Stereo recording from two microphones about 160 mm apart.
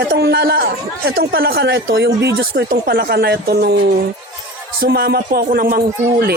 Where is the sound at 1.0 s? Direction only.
80° right.